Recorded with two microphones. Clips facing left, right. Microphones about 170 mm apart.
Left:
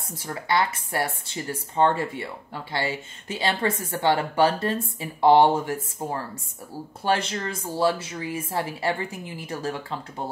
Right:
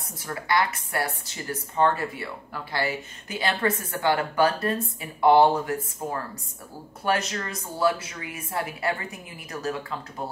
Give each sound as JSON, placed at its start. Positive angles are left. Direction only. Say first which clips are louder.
{"t": 0.2, "sound": "speech", "louder": "left 1 dB", "side_deg": 25}
{"t": 7.1, "sound": "speech", "louder": "left 1 dB", "side_deg": 30}